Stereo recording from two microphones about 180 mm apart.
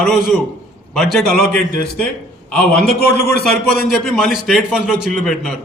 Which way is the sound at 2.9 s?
60° left (ahead or behind).